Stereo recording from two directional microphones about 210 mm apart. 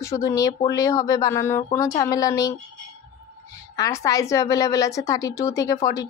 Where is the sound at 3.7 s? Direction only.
15° left (ahead or behind).